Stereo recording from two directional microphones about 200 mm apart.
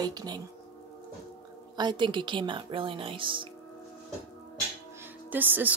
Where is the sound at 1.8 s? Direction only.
25° right (ahead or behind).